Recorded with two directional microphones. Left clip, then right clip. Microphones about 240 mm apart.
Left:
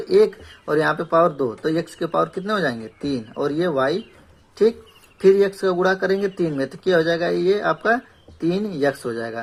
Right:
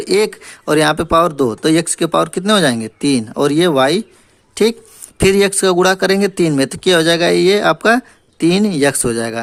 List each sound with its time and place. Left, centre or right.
0.0 s speech: right
5.1 s speech: right